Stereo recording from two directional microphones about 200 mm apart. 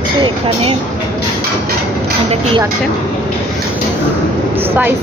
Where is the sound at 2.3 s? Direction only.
30° right (ahead or behind).